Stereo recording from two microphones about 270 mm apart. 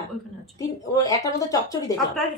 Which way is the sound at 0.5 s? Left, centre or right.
Centre.